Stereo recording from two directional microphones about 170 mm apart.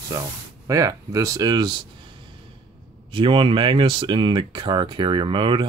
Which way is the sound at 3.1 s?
30° right (ahead or behind).